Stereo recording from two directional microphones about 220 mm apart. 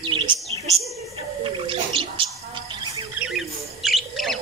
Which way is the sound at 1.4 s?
25° right (ahead or behind).